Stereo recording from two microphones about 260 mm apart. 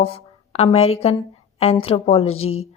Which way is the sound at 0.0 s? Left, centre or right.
Left.